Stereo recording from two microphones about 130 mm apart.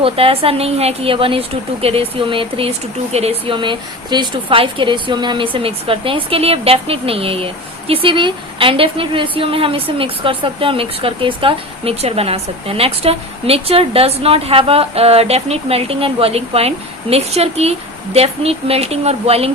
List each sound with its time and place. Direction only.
0.0 s speech: 45° right (ahead or behind)